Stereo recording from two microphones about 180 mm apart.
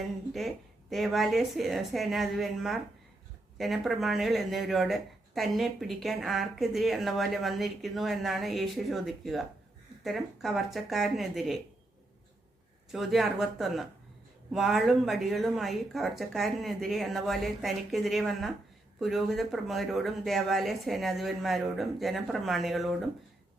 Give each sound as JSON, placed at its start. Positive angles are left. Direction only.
{"t": 0.3, "sound": "speech", "side_deg": 0}
{"t": 12.9, "sound": "speech", "side_deg": 0}